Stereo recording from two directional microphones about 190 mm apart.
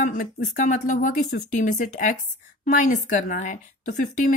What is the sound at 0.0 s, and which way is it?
A woman's voice, 45° left (ahead or behind).